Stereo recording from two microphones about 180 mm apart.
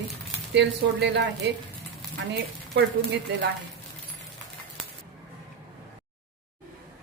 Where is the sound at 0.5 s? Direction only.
70° right (ahead or behind).